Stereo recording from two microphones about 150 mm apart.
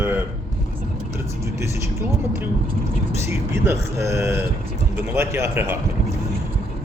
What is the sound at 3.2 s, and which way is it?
A man's voice, 15° right (ahead or behind).